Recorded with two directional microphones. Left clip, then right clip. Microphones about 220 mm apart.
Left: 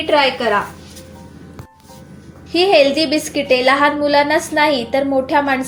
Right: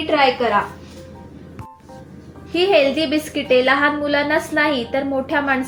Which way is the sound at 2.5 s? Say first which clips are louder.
Left 3 dB; 30° left (ahead or behind).